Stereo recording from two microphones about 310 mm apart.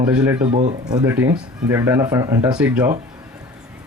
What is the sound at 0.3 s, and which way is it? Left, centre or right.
Speech, centre.